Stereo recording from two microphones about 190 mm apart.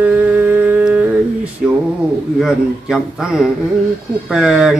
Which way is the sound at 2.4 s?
Centre (ahead or behind).